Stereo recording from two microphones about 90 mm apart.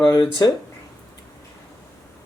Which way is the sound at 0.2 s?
50° left (ahead or behind).